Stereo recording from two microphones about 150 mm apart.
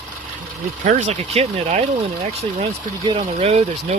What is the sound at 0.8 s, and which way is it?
Speech, 55° right (ahead or behind).